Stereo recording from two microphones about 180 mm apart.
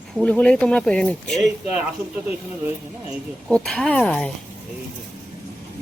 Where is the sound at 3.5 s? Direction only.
5° left (ahead or behind).